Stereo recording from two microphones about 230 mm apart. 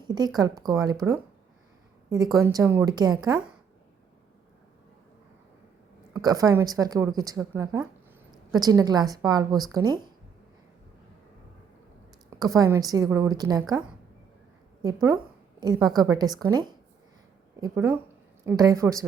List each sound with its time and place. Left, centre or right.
0.0 s a woman's voice: centre
2.0 s a woman's voice: centre
6.1 s a woman's voice: centre
12.4 s a woman's voice: centre